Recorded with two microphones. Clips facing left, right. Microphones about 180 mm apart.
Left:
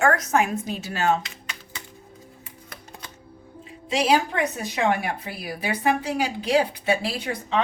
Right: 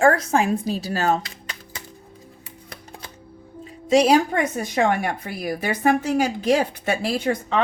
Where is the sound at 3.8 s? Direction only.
40° right (ahead or behind).